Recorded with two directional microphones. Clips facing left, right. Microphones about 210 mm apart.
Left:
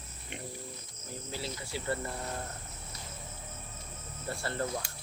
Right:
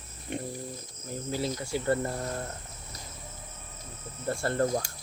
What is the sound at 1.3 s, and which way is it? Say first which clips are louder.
Speech: right 8 dB; 45° right (ahead or behind).